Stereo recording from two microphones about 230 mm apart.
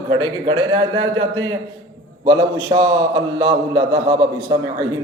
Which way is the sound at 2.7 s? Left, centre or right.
Right.